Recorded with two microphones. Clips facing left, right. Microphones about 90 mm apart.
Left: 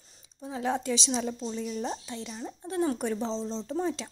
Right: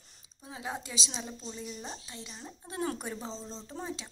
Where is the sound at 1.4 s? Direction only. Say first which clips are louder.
Left 9 dB; 65° left (ahead or behind).